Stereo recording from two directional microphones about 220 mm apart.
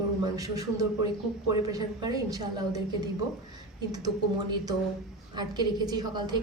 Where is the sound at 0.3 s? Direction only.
15° right (ahead or behind).